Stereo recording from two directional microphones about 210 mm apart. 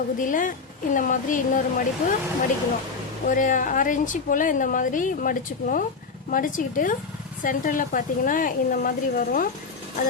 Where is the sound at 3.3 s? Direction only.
40° left (ahead or behind).